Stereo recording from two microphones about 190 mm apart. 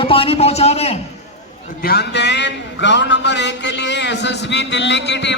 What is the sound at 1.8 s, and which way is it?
A man's voice, 55° left (ahead or behind).